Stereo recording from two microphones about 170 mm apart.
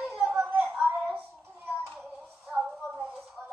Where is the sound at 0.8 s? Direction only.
10° right (ahead or behind).